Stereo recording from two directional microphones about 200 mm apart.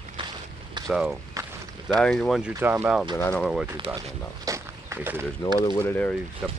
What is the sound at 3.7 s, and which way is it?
Speech, 25° right (ahead or behind).